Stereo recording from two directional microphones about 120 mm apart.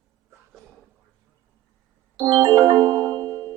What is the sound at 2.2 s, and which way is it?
Music, 35° right (ahead or behind).